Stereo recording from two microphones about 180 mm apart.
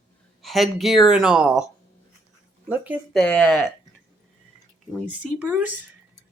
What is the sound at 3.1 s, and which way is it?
Speech, 5° left (ahead or behind).